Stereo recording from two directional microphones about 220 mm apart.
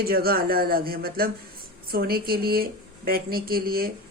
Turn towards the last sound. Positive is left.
turn(degrees=-40)  # may be behind; listen again after turning